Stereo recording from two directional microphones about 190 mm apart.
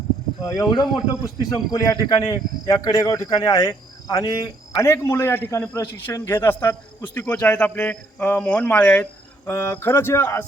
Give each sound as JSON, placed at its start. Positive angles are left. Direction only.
{"t": 0.4, "sound": "speech", "side_deg": 15}